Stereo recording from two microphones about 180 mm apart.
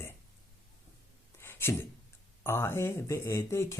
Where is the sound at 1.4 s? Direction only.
15° left (ahead or behind).